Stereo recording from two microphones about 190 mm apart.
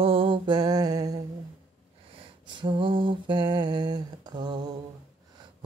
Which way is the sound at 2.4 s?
25° right (ahead or behind).